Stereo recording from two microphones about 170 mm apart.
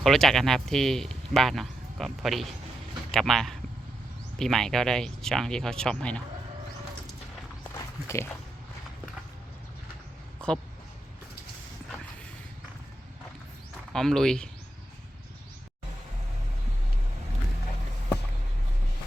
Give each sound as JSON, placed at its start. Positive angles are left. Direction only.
{"t": 0.0, "sound": "speech", "side_deg": 0}
{"t": 7.7, "sound": "walk", "side_deg": 15}
{"t": 10.4, "sound": "a sound", "side_deg": 5}
{"t": 13.9, "sound": "speech", "side_deg": 5}